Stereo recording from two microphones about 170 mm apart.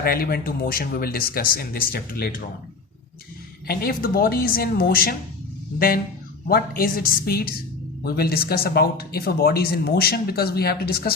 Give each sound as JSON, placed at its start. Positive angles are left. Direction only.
{"t": 0.0, "sound": "speech", "side_deg": 60}
{"t": 3.7, "sound": "speech", "side_deg": 60}
{"t": 6.5, "sound": "speech", "side_deg": 60}